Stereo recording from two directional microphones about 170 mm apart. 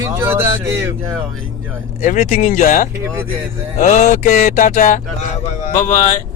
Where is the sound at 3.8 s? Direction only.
40° left (ahead or behind).